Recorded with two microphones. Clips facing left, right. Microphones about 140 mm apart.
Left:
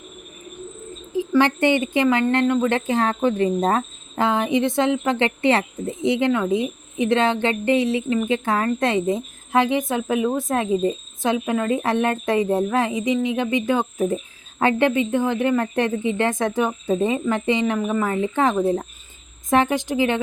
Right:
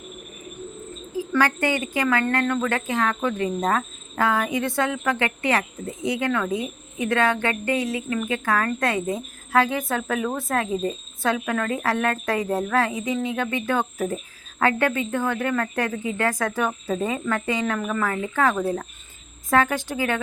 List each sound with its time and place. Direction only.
1.1 s speech: 20° left (ahead or behind)